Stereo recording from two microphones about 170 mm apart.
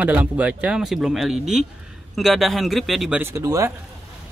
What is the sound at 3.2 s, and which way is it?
Speech, 20° right (ahead or behind).